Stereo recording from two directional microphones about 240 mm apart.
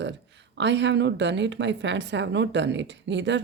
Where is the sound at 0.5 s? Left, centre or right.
Right.